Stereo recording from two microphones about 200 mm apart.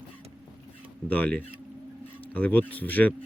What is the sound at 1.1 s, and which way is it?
Speech, 5° left (ahead or behind).